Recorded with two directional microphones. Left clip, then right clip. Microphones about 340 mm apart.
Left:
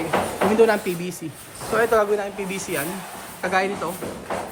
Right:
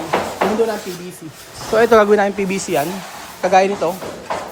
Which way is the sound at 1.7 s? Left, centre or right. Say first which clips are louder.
Right 8 dB; right.